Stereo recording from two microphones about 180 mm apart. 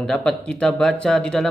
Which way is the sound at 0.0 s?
5° left (ahead or behind).